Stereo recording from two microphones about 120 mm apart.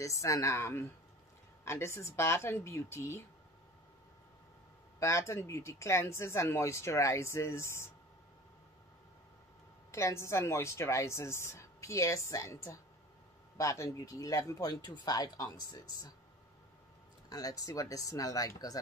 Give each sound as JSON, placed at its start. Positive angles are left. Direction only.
{"t": 0.0, "sound": "speech", "side_deg": 25}
{"t": 5.0, "sound": "speech", "side_deg": 25}
{"t": 9.8, "sound": "speech", "side_deg": 25}
{"t": 17.3, "sound": "speech", "side_deg": 30}